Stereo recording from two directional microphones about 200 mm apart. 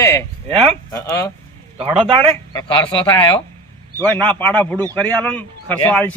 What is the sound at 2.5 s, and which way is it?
Speech, 20° left (ahead or behind).